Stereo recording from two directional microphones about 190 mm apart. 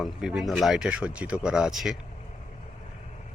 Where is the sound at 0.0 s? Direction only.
Centre (ahead or behind).